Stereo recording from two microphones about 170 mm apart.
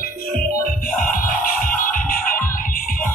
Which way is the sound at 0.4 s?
55° left (ahead or behind).